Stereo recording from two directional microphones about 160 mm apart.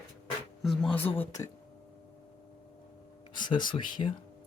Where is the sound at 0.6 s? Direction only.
Centre (ahead or behind).